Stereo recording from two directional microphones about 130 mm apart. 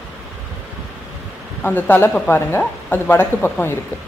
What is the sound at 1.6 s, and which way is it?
Speech, 15° left (ahead or behind).